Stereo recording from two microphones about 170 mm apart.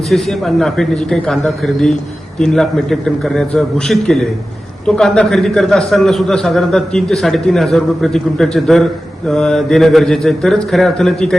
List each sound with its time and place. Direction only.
0.1 s a man's voice: centre (ahead or behind)